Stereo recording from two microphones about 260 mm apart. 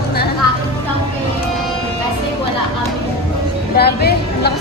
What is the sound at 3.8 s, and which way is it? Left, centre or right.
Speech, left.